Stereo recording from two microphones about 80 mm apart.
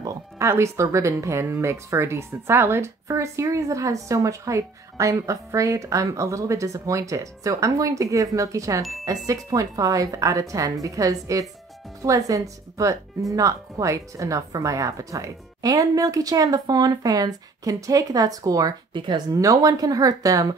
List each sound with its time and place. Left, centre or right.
0.4 s speech: right
18.9 s speech: right
19.3 s speech: right